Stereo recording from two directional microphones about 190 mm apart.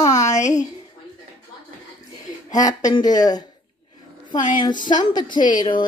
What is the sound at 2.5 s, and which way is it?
Speech, 20° left (ahead or behind).